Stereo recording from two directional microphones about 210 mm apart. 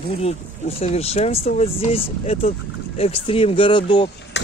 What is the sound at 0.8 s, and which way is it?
Speech, 30° left (ahead or behind).